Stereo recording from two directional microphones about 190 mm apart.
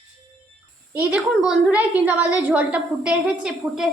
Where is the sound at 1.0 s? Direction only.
10° right (ahead or behind).